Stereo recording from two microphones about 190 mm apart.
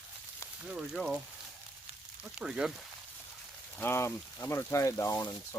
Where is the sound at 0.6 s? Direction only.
5° right (ahead or behind).